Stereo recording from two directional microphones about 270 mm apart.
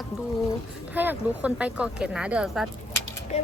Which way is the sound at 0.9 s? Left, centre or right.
Centre.